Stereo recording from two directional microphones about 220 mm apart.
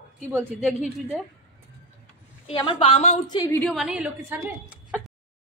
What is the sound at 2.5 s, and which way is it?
Speech, 25° left (ahead or behind).